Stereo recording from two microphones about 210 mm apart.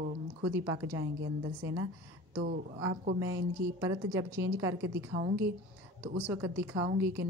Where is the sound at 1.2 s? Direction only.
70° right (ahead or behind).